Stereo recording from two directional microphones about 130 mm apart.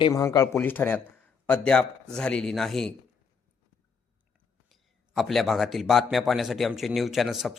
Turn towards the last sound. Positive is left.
turn(degrees=0)  # may be behind; listen again after turning